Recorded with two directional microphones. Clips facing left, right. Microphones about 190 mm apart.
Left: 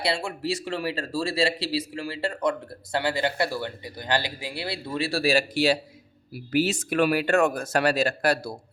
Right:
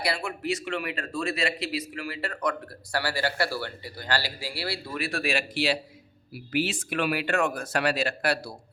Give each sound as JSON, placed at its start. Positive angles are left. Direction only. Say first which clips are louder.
{"t": 0.0, "sound": "speech", "louder": "left 2 dB", "side_deg": 25}